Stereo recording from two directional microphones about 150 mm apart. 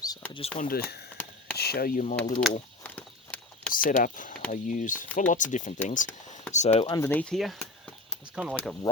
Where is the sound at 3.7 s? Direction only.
70° left (ahead or behind); by 6.9 s 50° left (ahead or behind).